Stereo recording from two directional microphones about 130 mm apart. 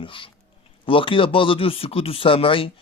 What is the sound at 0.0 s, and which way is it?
Speech, 40° left (ahead or behind).